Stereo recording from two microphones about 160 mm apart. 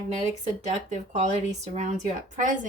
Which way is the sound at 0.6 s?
45° right (ahead or behind).